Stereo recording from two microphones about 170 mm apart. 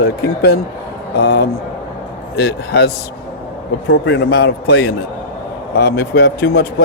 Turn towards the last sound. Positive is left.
turn(degrees=70)  # may be behind; listen again after turning